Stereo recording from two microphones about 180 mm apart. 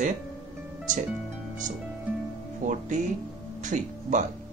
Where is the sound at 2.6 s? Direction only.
45° right (ahead or behind).